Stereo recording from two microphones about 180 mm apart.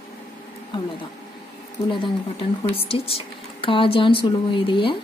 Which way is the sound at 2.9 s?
30° left (ahead or behind).